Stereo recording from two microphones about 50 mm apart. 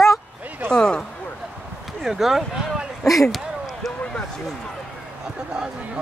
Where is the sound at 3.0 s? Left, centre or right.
Centre.